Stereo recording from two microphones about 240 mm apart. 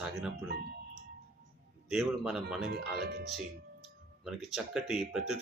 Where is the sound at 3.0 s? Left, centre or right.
Right.